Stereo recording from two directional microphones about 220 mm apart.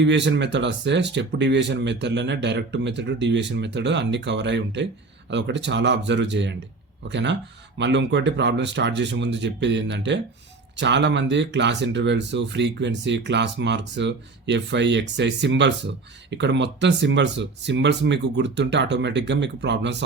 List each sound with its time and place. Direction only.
0.0 s speech: 55° right (ahead or behind)